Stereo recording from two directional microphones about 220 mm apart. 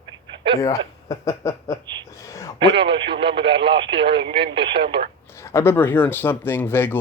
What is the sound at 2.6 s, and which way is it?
Speech, 25° right (ahead or behind).